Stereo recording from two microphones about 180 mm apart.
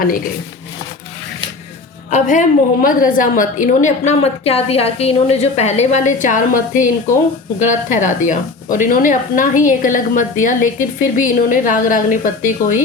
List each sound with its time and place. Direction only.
2.0 s a woman's voice: 40° left (ahead or behind)